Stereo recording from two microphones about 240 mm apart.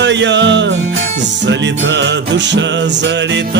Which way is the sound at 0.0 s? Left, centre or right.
Right.